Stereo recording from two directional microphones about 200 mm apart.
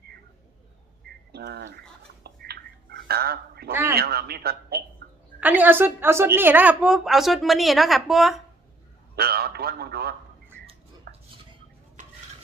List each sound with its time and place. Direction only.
1.3 s a man's voice: 55° right (ahead or behind)
2.2 s a sound: 55° right (ahead or behind)
3.7 s a man's voice: 10° right (ahead or behind)
3.9 s a man's voice: 50° right (ahead or behind)
5.4 s a woman's voice: 10° right (ahead or behind)
9.1 s a man's voice: 50° right (ahead or behind)
11.1 s a sound: 50° right (ahead or behind)